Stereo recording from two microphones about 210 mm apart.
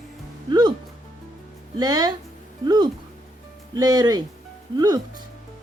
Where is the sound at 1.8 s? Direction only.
20° right (ahead or behind).